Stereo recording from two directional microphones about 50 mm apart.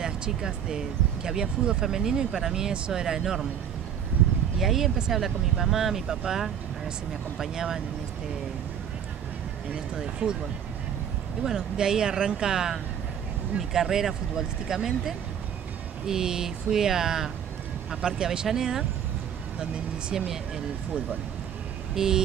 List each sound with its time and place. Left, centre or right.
0.0 s speech: centre
4.6 s speech: centre
9.9 s speech: centre
11.4 s speech: centre
21.9 s vehicle: centre